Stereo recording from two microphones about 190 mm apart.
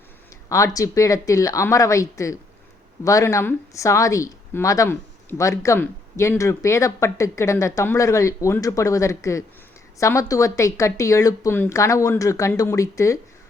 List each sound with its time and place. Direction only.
0.4 s speech: 15° left (ahead or behind)